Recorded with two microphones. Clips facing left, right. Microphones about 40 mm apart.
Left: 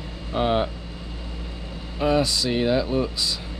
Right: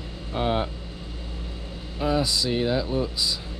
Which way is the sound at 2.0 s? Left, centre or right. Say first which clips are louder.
Left 3 dB; centre.